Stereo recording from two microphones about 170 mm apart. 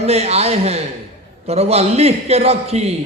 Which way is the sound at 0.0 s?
40° right (ahead or behind).